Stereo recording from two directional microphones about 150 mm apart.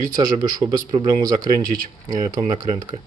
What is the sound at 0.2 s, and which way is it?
A man's voice, 25° right (ahead or behind).